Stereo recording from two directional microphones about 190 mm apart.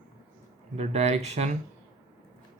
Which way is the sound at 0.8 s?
35° right (ahead or behind).